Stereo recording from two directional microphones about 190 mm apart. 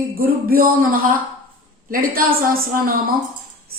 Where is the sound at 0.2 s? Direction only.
50° right (ahead or behind).